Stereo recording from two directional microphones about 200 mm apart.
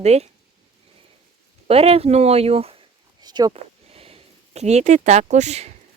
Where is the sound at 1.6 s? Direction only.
30° right (ahead or behind).